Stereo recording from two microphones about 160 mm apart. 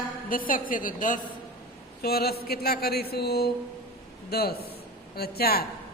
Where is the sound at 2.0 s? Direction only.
75° left (ahead or behind).